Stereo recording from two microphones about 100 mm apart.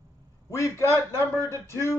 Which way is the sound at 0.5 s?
30° left (ahead or behind).